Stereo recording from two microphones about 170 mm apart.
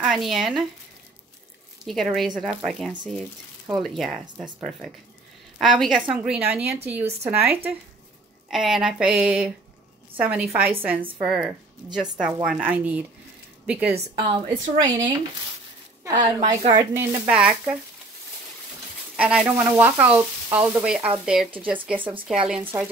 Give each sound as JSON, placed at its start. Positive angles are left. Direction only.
{"t": 0.0, "sound": "speech", "side_deg": 0}
{"t": 1.9, "sound": "speech", "side_deg": 0}
{"t": 6.1, "sound": "frying", "side_deg": -5}
{"t": 8.5, "sound": "speech", "side_deg": 0}
{"t": 10.1, "sound": "frying", "side_deg": -10}
{"t": 11.2, "sound": "speech", "side_deg": -5}
{"t": 12.4, "sound": "frying", "side_deg": -10}
{"t": 14.1, "sound": "a woman's voice", "side_deg": -25}
{"t": 16.0, "sound": "a woman's voice", "side_deg": -20}
{"t": 16.3, "sound": "a woman's voice", "side_deg": -45}
{"t": 16.9, "sound": "frying", "side_deg": -5}
{"t": 19.1, "sound": "frying", "side_deg": -5}
{"t": 21.5, "sound": "speech", "side_deg": -30}
{"t": 22.5, "sound": "frying", "side_deg": -10}